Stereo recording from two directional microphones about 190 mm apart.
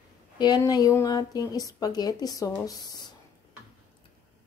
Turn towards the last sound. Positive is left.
turn(degrees=20)  # may be behind; listen again after turning